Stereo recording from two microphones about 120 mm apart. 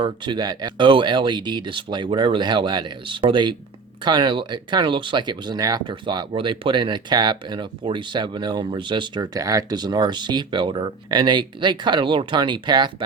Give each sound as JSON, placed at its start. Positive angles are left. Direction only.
{"t": 0.0, "sound": "speech", "side_deg": -40}